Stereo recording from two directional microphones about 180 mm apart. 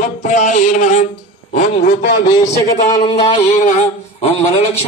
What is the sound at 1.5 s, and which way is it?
Speech, 40° left (ahead or behind).